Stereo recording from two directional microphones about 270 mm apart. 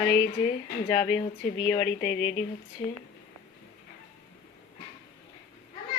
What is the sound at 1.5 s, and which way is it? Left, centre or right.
Speech, centre.